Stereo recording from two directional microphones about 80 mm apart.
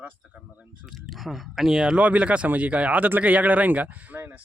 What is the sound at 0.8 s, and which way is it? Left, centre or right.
Speech, centre.